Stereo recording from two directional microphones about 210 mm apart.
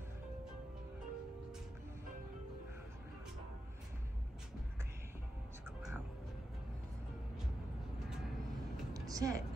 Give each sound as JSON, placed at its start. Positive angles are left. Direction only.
{"t": 8.9, "sound": "vehicle", "side_deg": -15}